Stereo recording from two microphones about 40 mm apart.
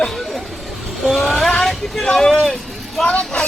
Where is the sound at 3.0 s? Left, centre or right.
Left.